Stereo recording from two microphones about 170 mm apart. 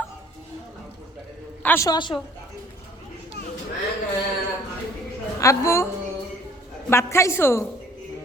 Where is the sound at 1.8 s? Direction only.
25° left (ahead or behind).